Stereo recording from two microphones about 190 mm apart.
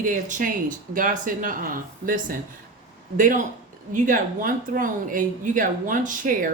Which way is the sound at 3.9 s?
45° right (ahead or behind).